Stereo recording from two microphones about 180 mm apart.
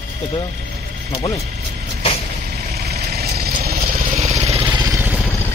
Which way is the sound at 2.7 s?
60° right (ahead or behind).